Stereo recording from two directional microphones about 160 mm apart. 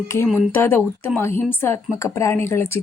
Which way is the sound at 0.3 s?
15° left (ahead or behind).